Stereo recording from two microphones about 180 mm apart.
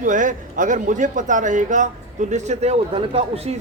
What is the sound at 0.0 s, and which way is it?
Speech, 45° right (ahead or behind).